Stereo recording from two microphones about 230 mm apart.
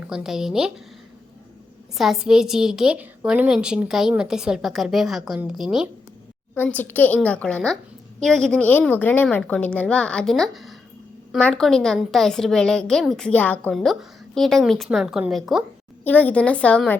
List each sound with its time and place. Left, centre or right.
0.1 s a woman's voice: centre
2.0 s a woman's voice: centre